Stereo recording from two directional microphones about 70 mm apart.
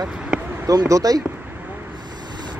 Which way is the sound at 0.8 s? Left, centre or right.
Right.